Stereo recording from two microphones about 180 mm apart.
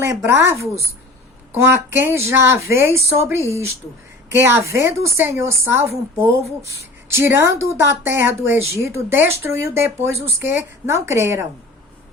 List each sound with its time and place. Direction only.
0.0 s speech: 15° right (ahead or behind)
10.8 s speech: 15° right (ahead or behind)